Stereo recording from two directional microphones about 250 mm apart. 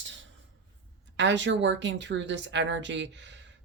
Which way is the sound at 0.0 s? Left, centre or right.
Right.